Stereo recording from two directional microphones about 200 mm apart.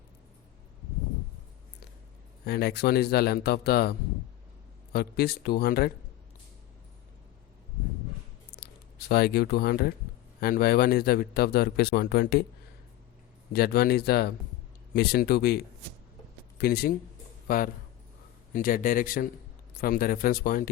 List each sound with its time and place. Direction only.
2.5 s a man's voice: 50° left (ahead or behind)
8.5 s a sound: 50° left (ahead or behind)
10.4 s a man's voice: 50° left (ahead or behind)
13.5 s a man's voice: 50° left (ahead or behind)